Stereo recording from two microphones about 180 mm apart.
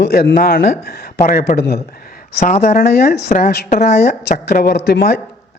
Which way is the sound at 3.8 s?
60° left (ahead or behind).